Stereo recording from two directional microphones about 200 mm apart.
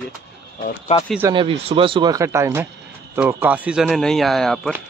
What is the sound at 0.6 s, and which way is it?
Speech, 35° left (ahead or behind).